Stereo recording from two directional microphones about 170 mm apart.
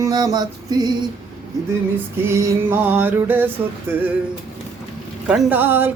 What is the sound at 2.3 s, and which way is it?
Speech, 15° right (ahead or behind).